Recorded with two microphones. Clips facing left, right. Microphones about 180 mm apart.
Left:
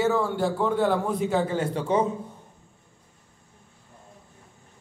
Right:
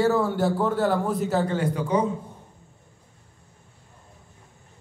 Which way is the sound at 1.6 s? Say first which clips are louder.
Even; 25° left (ahead or behind).